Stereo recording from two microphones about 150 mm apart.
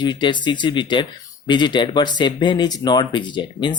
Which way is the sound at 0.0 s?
30° left (ahead or behind).